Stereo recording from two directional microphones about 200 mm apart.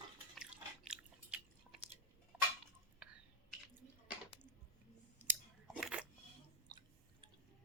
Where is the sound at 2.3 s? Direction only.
5° right (ahead or behind).